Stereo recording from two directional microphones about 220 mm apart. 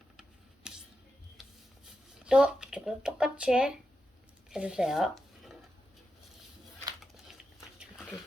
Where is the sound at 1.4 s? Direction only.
Centre (ahead or behind).